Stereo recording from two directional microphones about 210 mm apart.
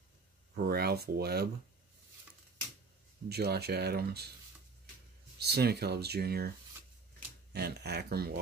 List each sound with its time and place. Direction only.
0.6 s speech: 45° right (ahead or behind)
3.3 s speech: 50° right (ahead or behind)
5.4 s speech: 50° right (ahead or behind)
7.5 s speech: 50° right (ahead or behind)